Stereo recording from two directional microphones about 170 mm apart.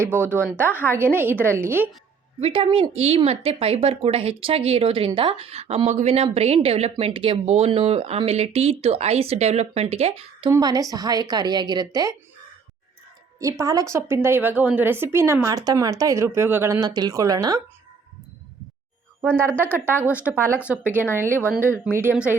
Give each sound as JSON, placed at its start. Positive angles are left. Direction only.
{"t": 0.0, "sound": "a woman's voice", "side_deg": -10}
{"t": 0.4, "sound": "speech", "side_deg": 10}
{"t": 1.1, "sound": "a woman's voice", "side_deg": -10}
{"t": 2.4, "sound": "speech", "side_deg": -30}
{"t": 10.5, "sound": "a woman's voice", "side_deg": -20}
{"t": 13.4, "sound": "a woman's voice", "side_deg": -20}
{"t": 19.2, "sound": "a woman's voice", "side_deg": -10}